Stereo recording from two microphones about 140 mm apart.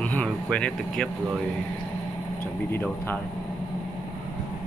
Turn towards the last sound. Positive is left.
turn(degrees=15)  # may be behind; listen again after turning